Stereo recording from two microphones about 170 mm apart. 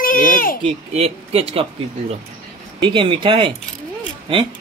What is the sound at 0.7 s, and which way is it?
Speech, 35° right (ahead or behind).